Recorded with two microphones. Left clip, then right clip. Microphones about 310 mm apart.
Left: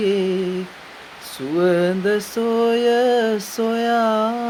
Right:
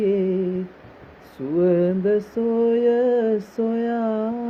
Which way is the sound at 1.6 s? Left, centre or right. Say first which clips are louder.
Left 2 dB; centre.